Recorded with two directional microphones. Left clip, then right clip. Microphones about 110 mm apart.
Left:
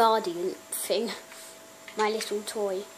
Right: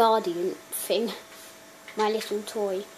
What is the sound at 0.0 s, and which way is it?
Speech, 10° right (ahead or behind).